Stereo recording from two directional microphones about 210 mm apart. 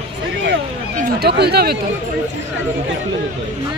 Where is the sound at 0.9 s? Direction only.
45° right (ahead or behind).